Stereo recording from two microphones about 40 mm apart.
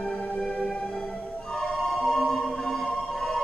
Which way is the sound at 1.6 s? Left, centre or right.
Centre.